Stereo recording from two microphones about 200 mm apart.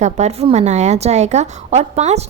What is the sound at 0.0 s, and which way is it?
A woman's voice, 35° right (ahead or behind).